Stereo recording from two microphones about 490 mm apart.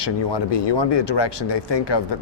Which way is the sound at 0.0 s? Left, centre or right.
Left.